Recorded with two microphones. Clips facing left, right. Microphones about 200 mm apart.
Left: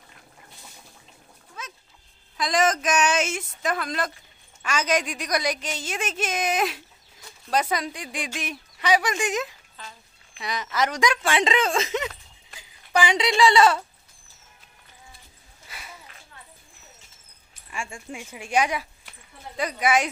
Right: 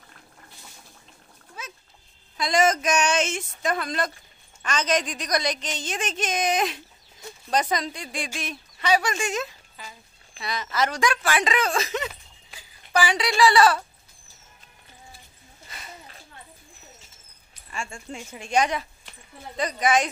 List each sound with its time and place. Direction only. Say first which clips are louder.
2.3 s a woman's voice: right 1 dB; centre (ahead or behind)
7.7 s a woman's voice: right 1 dB; 10° left (ahead or behind)
9.8 s speech: even; 10° right (ahead or behind)
10.4 s a woman's voice: even; 15° left (ahead or behind)
15.7 s a sound: even; 10° left (ahead or behind)
17.6 s a woman's voice: even; 15° left (ahead or behind)